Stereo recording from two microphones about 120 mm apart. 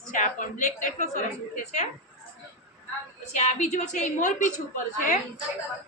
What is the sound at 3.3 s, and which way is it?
A woman's voice, 80° left.